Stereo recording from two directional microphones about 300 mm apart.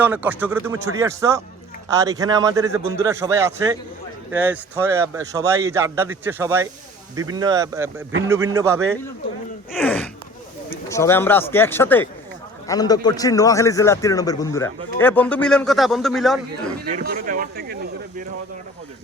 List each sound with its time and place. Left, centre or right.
0.0 s a man's voice: centre
9.7 s a sound: centre
10.7 s a man's voice: centre
16.9 s speech: right